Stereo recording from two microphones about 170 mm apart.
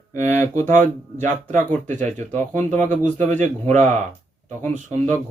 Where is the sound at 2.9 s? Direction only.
45° right (ahead or behind).